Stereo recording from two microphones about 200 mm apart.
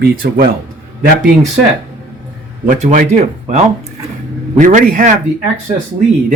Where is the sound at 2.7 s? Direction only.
40° right (ahead or behind).